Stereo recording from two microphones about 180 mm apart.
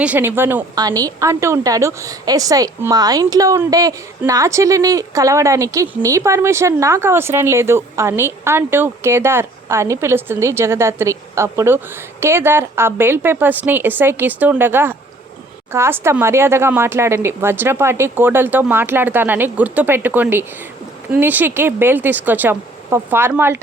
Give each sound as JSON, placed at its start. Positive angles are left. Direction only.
{"t": 0.0, "sound": "a woman's voice", "side_deg": -10}